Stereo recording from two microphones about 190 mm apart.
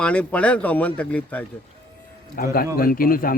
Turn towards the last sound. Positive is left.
turn(degrees=50)  # may be behind; listen again after turning